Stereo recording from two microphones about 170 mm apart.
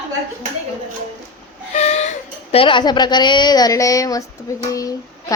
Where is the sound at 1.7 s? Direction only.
40° left (ahead or behind).